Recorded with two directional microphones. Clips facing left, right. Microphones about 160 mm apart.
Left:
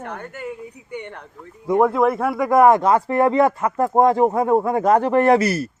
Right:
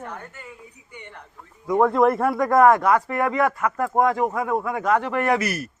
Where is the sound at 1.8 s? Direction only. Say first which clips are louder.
Even; centre (ahead or behind).